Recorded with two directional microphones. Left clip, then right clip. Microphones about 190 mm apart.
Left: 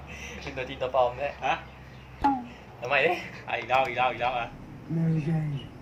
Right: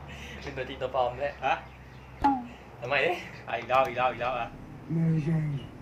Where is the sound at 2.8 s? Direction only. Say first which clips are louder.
Left 3 dB; 15° left (ahead or behind).